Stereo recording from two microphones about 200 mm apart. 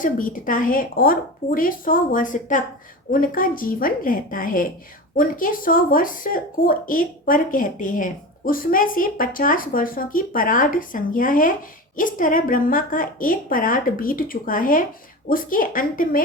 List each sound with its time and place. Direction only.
0.0 s speech: 40° left (ahead or behind)